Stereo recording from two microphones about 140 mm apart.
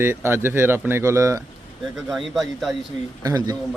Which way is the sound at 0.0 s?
15° right (ahead or behind).